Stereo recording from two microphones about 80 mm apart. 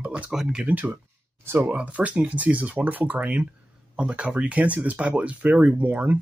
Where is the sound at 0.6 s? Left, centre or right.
Right.